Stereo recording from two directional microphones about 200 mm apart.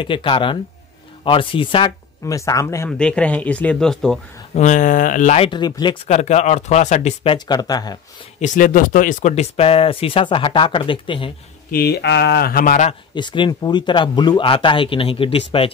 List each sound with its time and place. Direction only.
0.0 s speech: 25° left (ahead or behind); by 4.2 s centre (ahead or behind)
4.6 s speech: 40° left (ahead or behind); by 5.9 s 20° left (ahead or behind)
6.0 s speech: 35° left (ahead or behind)
7.3 s speech: 20° left (ahead or behind)
8.4 s speech: 40° left (ahead or behind); by 11.3 s 25° left (ahead or behind)
11.7 s speech: 50° left (ahead or behind)
13.1 s speech: 25° left (ahead or behind)